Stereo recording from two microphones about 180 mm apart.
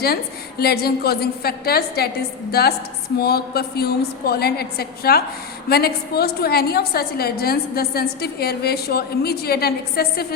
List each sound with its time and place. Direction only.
0.6 s a woman's voice: 60° left (ahead or behind)